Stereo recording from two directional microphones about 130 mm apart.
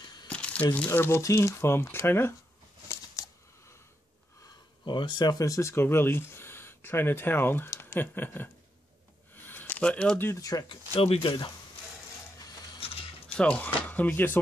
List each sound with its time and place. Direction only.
0.3 s crumpling: 10° left (ahead or behind)
0.7 s speech: 15° left (ahead or behind)
3.2 s a sound: 25° left (ahead or behind)
4.8 s speech: 35° left (ahead or behind); by 8.5 s 15° left (ahead or behind)
9.3 s a sound: 15° left (ahead or behind)
10.4 s speech: 30° left (ahead or behind)
11.0 s speech: 40° left (ahead or behind)
12.8 s a sound: 45° left (ahead or behind)
13.4 s speech: 10° left (ahead or behind)